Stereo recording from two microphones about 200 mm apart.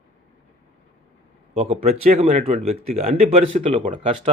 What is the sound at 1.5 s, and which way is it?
A man's voice, 30° right (ahead or behind).